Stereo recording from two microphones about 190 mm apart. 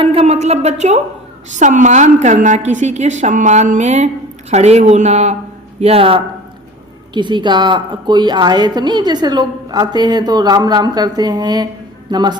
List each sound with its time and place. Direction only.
0.0 s a woman's voice: 30° right (ahead or behind)